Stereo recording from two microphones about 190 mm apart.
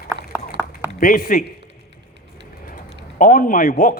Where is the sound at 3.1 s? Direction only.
45° left (ahead or behind).